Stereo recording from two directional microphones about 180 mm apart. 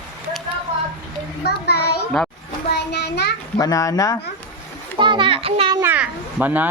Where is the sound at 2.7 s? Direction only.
65° left (ahead or behind).